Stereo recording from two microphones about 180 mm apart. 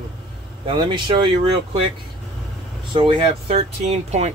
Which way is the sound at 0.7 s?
25° right (ahead or behind).